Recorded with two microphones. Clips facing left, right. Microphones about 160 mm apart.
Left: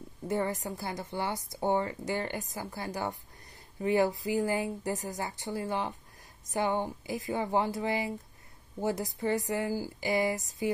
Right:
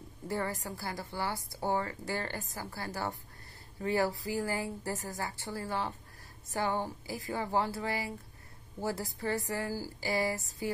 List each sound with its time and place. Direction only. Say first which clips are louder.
0.3 s a woman's voice: left 4 dB; 20° left (ahead or behind)